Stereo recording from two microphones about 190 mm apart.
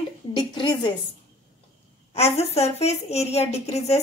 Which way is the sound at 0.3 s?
25° left (ahead or behind).